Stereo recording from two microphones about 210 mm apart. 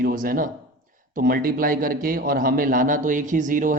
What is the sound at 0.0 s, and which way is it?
A man's voice, 40° right (ahead or behind).